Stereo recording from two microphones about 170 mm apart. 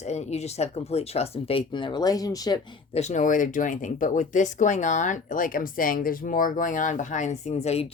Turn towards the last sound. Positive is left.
turn(degrees=40)  # may be behind; listen again after turning